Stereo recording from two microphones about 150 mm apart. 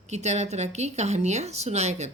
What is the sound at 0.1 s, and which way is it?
A woman's voice, 50° right (ahead or behind).